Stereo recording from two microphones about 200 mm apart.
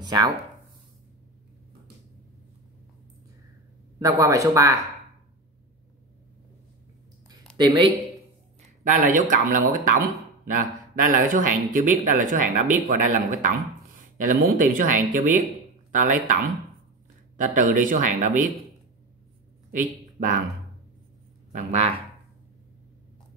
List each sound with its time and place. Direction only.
0.0 s speech: 20° right (ahead or behind)
4.0 s speech: 15° right (ahead or behind)
7.5 s speech: 25° right (ahead or behind)
8.8 s speech: 40° right (ahead or behind)
17.4 s speech: 40° right (ahead or behind)
19.7 s speech: 40° right (ahead or behind)
21.5 s speech: 35° right (ahead or behind)